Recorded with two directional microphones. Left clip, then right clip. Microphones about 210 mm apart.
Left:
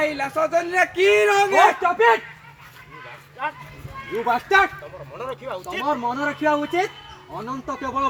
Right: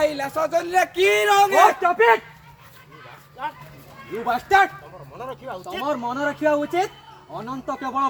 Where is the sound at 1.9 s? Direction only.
Centre (ahead or behind).